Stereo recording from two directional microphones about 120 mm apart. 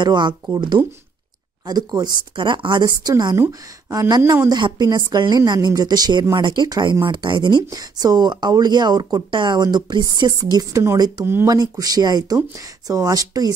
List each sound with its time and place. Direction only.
0.0 s speech: 40° right (ahead or behind)
1.7 s a woman's voice: 35° right (ahead or behind)
4.5 s speech: 35° right (ahead or behind)